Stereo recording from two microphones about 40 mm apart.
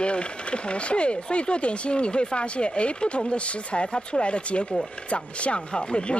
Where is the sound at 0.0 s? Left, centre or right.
Left.